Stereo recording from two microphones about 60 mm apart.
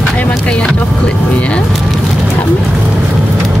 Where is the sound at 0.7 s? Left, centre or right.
Left.